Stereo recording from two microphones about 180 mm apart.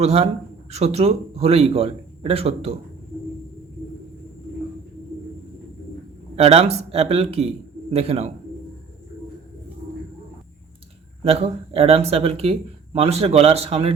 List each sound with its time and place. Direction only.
0.0 s speech: 35° right (ahead or behind)
6.3 s speech: 35° right (ahead or behind)
11.2 s speech: 35° right (ahead or behind)